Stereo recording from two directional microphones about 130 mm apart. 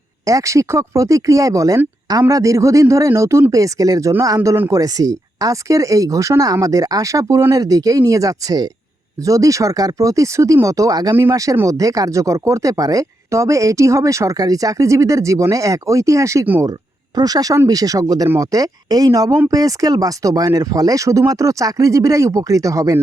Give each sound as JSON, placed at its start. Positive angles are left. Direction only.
{"t": 0.3, "sound": "speech", "side_deg": -25}